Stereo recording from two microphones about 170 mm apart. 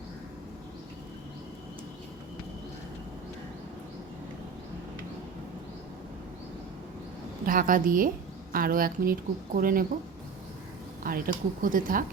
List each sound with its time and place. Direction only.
7.4 s speech: 55° right (ahead or behind)
11.1 s speech: 55° right (ahead or behind)